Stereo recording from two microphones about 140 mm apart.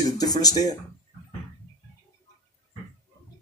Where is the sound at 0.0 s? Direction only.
25° left (ahead or behind).